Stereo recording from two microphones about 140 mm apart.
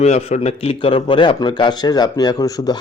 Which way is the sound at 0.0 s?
50° left (ahead or behind).